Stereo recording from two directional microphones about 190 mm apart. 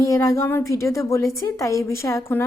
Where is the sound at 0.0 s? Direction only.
15° left (ahead or behind).